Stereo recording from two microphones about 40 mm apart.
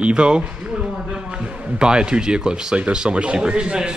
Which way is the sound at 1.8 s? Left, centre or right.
Right.